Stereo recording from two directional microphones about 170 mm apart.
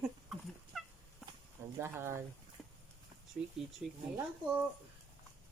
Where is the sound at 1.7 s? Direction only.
15° right (ahead or behind).